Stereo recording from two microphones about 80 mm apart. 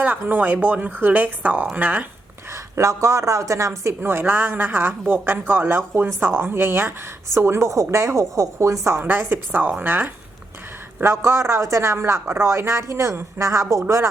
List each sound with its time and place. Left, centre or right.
0.0 s a woman's voice: right
2.7 s a woman's voice: right
11.0 s speech: right